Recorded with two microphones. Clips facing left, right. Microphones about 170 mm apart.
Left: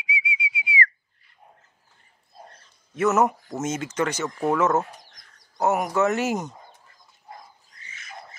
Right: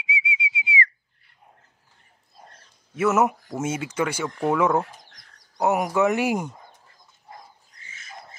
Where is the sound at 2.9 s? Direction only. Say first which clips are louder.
Even; 10° right (ahead or behind).